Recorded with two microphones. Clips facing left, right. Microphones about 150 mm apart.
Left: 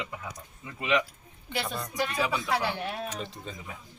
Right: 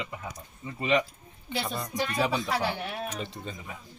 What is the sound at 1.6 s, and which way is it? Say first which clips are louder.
A man's voice: even; 10° right (ahead or behind).